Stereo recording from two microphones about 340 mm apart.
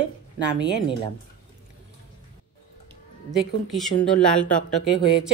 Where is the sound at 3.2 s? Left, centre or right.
Centre.